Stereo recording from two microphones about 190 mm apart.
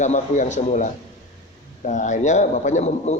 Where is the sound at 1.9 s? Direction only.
40° left (ahead or behind).